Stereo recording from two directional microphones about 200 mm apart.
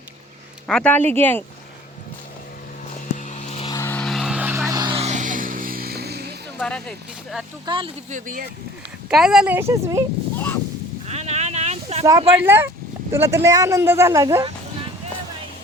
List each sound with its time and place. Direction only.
0.7 s speech: 5° left (ahead or behind)
3.2 s vehicle: 35° left (ahead or behind)
3.7 s vehicle: 15° left (ahead or behind); by 6.3 s 55° right (ahead or behind)
6.6 s a sound: 5° left (ahead or behind)
7.6 s speech: 25° right (ahead or behind)
8.1 s speech: 40° right (ahead or behind)
9.0 s speech: 5° right (ahead or behind)
10.3 s wind noise: 10° left (ahead or behind)
11.0 s a sound: 35° right (ahead or behind)
12.4 s speech: 10° right (ahead or behind)